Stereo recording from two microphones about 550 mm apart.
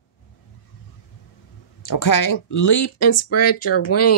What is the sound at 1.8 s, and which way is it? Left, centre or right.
Speech, left.